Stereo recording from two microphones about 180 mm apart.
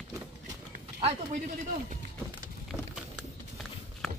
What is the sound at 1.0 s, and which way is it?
Speech, 35° right (ahead or behind).